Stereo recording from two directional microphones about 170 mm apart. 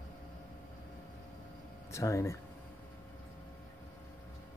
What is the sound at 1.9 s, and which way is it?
Speech, 20° left (ahead or behind).